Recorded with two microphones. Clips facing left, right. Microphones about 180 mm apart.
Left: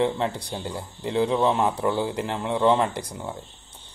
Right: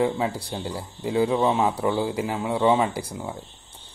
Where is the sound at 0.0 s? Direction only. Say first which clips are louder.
Even; 5° right (ahead or behind).